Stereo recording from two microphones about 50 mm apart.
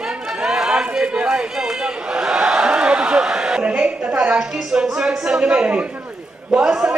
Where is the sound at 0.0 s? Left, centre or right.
Centre.